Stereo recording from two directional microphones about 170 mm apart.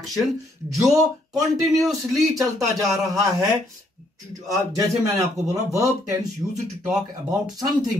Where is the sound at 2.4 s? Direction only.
20° right (ahead or behind).